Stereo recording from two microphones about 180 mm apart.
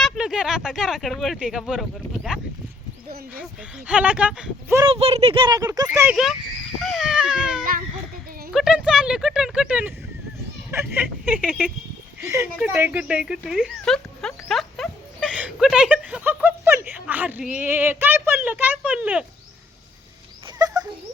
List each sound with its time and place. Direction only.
0.0 s speech: 5° right (ahead or behind)
4.9 s speech: 35° right (ahead or behind); by 6.1 s 15° right (ahead or behind)
6.7 s baby cry: centre (ahead or behind)
7.6 s a sound: 50° right (ahead or behind)
8.5 s speech: 5° right (ahead or behind)
11.4 s speech: centre (ahead or behind)
12.2 s speech: 15° right (ahead or behind)